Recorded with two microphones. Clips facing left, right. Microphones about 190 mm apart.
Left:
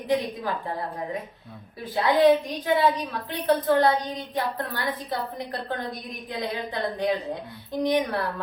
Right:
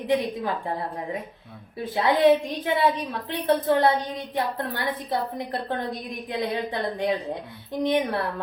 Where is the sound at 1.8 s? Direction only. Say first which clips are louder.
Even; 25° right (ahead or behind).